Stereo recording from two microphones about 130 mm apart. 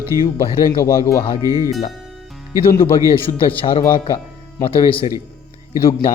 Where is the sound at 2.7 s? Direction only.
45° left (ahead or behind).